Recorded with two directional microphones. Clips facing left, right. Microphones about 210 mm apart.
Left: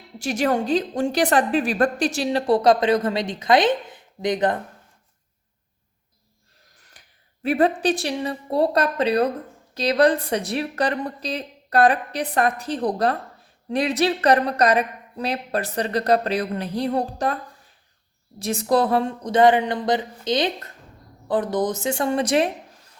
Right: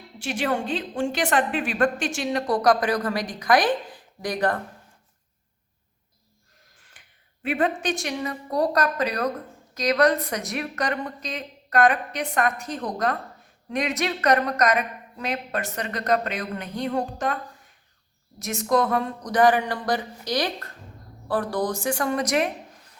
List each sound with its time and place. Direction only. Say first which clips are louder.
0.2 s a woman's voice: left 4 dB; 40° left (ahead or behind); by 4.6 s 20° left (ahead or behind)
6.7 s a sound: left 4 dB; 40° left (ahead or behind)
7.4 s a woman's voice: left 5 dB; 35° left (ahead or behind)
18.3 s speech: left 3 dB; 30° left (ahead or behind)